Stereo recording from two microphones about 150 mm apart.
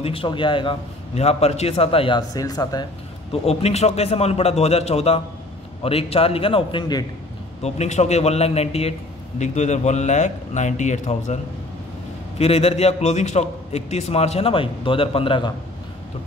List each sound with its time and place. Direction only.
0.0 s speech: 35° left (ahead or behind)
1.1 s speech: 45° left (ahead or behind); by 2.9 s 25° left (ahead or behind)
3.4 s a man's voice: 45° left (ahead or behind); by 7.1 s 30° left (ahead or behind)
7.6 s a man's voice: 45° left (ahead or behind)
12.4 s a man's voice: 45° left (ahead or behind)